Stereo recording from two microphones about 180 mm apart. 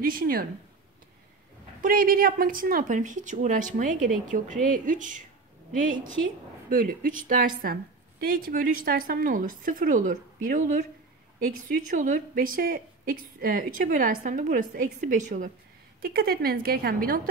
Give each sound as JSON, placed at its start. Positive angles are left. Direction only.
{"t": 0.0, "sound": "a woman's voice", "side_deg": -50}
{"t": 1.8, "sound": "a woman's voice", "side_deg": -50}
{"t": 6.7, "sound": "a woman's voice", "side_deg": -50}
{"t": 16.0, "sound": "a woman's voice", "side_deg": -60}